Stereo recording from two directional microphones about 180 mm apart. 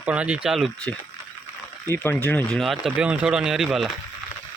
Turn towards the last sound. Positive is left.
turn(degrees=0)  # may be behind; listen again after turning